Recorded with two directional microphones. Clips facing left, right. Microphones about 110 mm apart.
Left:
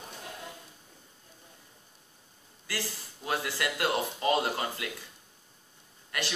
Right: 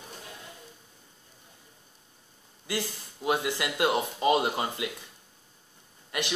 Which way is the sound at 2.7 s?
20° right (ahead or behind).